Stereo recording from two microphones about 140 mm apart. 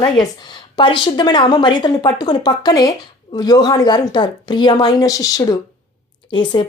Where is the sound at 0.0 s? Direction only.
35° left (ahead or behind).